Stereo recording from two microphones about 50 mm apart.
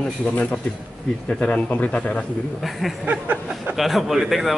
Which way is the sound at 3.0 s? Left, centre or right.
Right.